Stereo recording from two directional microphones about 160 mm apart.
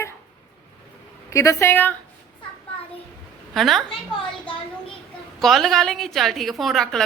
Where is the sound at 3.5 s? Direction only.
Centre (ahead or behind).